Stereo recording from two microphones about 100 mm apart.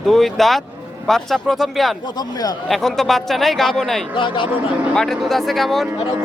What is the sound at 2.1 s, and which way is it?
Speech, 40° left (ahead or behind).